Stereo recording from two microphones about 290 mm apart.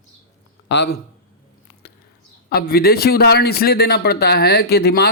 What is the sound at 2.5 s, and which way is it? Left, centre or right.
Speech, left.